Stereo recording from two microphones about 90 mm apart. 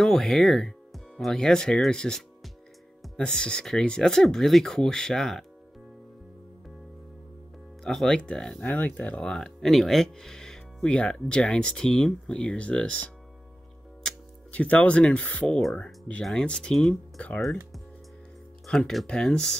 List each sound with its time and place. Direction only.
0.0 s speech: 5° left (ahead or behind)
7.8 s speech: 5° left (ahead or behind)
8.6 s speech: 20° left (ahead or behind)
14.5 s speech: 15° left (ahead or behind)
15.4 s speech: 5° left (ahead or behind)